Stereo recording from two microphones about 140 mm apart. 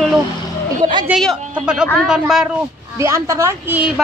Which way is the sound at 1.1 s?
5° right (ahead or behind).